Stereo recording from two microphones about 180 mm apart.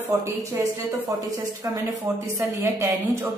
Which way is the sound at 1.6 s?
15° right (ahead or behind).